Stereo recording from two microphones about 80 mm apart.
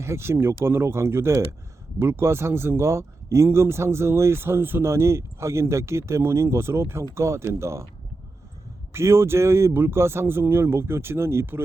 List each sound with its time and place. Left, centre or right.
0.0 s speech: right
8.9 s speech: right